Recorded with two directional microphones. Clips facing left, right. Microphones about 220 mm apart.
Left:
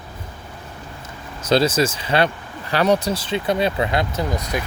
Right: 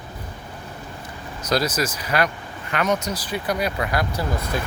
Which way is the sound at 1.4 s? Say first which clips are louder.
Left 5 dB; 30° left (ahead or behind).